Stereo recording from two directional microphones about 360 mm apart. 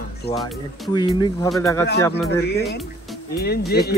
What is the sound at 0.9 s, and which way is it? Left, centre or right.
Speech, centre.